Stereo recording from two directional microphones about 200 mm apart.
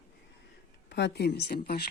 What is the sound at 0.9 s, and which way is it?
Speech, 60° left (ahead or behind).